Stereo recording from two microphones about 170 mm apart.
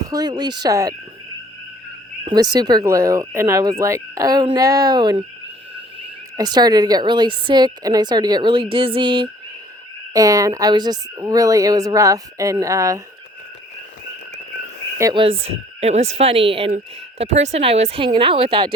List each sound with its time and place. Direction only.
0.0 s a woman's voice: 20° right (ahead or behind)
2.2 s a woman's voice: 25° right (ahead or behind)
6.3 s a woman's voice: 25° right (ahead or behind)
15.1 s speech: 30° right (ahead or behind)